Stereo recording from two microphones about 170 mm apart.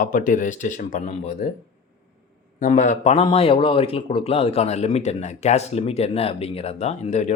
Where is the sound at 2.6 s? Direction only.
45° left (ahead or behind).